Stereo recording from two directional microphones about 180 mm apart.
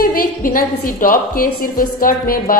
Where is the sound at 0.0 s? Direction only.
55° left (ahead or behind).